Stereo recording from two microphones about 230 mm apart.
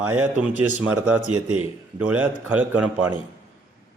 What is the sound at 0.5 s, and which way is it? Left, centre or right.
Speech, left.